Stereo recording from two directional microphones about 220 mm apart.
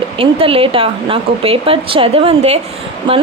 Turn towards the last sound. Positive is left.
turn(degrees=-20)  # may be behind; listen again after turning